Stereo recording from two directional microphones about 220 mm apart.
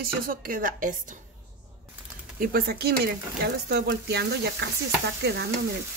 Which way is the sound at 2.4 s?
45° right (ahead or behind).